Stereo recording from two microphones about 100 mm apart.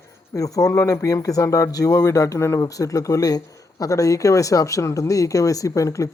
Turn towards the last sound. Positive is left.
turn(degrees=30)  # may be behind; listen again after turning